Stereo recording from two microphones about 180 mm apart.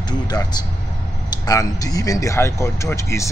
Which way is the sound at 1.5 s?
20° left (ahead or behind).